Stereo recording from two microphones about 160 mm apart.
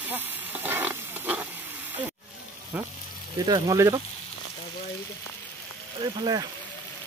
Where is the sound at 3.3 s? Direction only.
25° right (ahead or behind).